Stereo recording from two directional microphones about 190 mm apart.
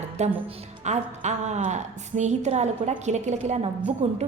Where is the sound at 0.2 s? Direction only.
35° right (ahead or behind).